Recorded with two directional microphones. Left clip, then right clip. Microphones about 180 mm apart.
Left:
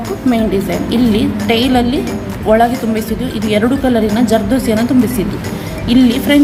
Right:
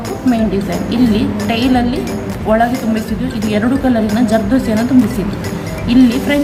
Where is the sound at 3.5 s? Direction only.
35° left (ahead or behind).